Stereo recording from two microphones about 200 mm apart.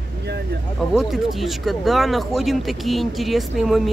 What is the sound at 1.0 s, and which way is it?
Speech, centre (ahead or behind).